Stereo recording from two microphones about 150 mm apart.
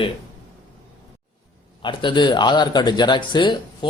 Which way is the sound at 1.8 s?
30° left (ahead or behind).